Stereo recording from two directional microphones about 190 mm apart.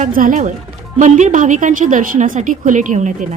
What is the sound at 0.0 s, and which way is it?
A woman's voice, 45° right (ahead or behind).